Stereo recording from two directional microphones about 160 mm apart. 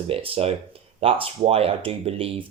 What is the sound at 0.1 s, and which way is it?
Speech, 35° right (ahead or behind).